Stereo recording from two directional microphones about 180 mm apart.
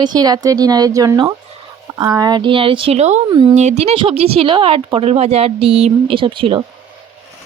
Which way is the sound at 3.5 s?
40° right (ahead or behind).